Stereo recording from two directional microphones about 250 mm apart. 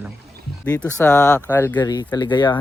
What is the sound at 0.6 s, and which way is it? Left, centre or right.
Speech, centre.